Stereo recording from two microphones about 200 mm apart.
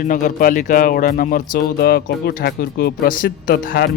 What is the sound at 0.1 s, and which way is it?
Speech, 40° left (ahead or behind).